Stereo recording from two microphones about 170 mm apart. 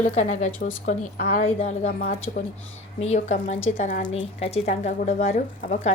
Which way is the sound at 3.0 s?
40° left (ahead or behind).